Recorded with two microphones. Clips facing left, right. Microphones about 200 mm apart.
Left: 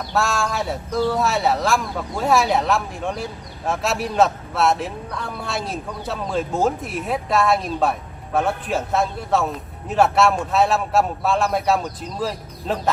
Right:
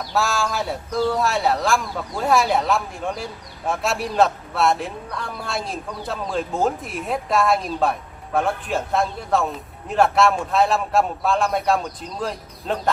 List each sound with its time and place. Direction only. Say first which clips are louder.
0.0 s speech: left 1 dB; centre (ahead or behind)